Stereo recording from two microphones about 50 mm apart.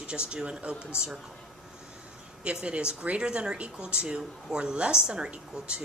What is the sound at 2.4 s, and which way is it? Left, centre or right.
Speech, right.